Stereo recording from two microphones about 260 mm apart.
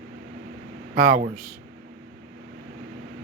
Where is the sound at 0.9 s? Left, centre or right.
Right.